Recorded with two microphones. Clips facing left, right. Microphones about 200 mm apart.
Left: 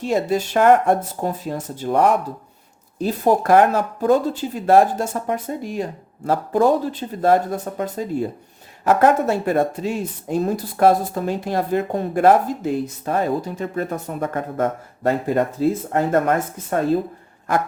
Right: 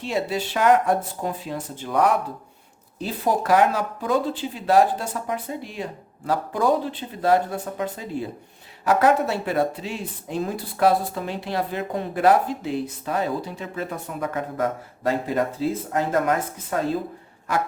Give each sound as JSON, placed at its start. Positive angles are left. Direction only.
{"t": 0.0, "sound": "speech", "side_deg": 45}